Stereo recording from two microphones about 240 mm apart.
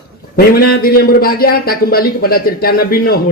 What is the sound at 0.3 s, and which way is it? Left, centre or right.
A man's voice, left.